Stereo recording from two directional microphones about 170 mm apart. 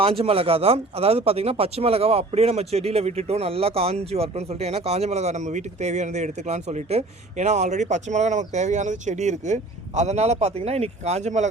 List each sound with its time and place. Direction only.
0.0 s speech: 35° right (ahead or behind)